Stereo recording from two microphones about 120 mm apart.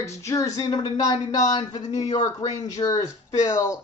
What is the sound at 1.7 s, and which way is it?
Speech, 70° left (ahead or behind).